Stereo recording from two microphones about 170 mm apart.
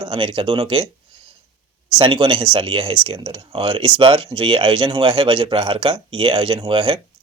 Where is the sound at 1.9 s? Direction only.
30° right (ahead or behind).